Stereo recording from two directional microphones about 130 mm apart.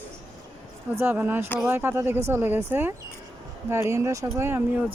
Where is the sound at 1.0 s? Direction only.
15° right (ahead or behind).